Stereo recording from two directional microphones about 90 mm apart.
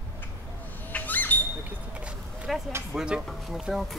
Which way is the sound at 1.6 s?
15° right (ahead or behind).